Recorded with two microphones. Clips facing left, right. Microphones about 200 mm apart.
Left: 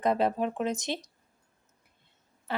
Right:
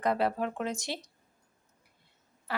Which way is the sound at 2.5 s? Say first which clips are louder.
Left 3 dB; 25° left (ahead or behind).